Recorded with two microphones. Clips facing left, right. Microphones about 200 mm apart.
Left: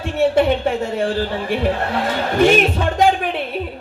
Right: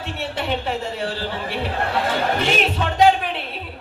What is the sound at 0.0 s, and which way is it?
A man's voice, 50° left (ahead or behind).